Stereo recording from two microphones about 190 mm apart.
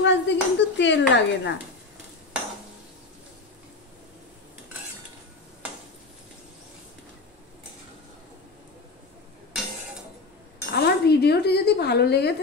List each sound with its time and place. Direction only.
0.0 s speech: 70° left (ahead or behind)
10.7 s dishes: 55° left (ahead or behind)